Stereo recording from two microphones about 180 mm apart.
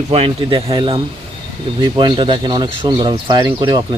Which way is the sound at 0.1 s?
30° right (ahead or behind).